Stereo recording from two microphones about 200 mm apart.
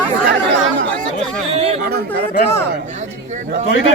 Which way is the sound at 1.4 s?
30° right (ahead or behind).